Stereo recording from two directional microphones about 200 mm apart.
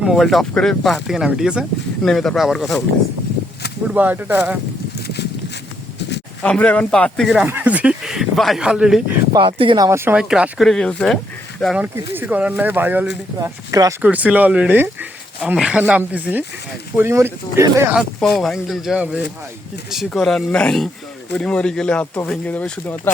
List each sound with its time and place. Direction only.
0.0 s speech: centre (ahead or behind)
3.8 s speech: 10° right (ahead or behind)
4.9 s a sound: 55° left (ahead or behind)
6.4 s speech: 5° left (ahead or behind)
9.3 s speech: 25° right (ahead or behind)
17.9 s speech: centre (ahead or behind)